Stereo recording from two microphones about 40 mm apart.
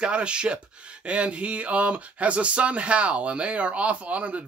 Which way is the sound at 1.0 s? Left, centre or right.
Right.